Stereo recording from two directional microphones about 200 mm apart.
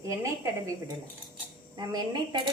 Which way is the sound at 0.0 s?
15° right (ahead or behind).